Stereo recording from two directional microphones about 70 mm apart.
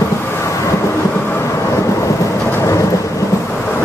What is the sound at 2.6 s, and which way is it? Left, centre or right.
Thunder, left.